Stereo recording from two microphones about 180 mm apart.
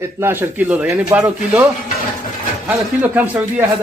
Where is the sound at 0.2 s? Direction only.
10° right (ahead or behind).